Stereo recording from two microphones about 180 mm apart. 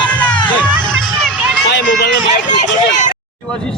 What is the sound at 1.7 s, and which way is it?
Run, 75° left (ahead or behind).